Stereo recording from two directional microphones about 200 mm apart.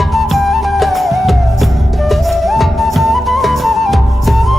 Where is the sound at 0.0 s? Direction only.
Centre (ahead or behind).